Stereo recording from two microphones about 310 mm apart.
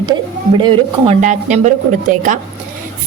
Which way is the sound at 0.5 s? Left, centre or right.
Centre.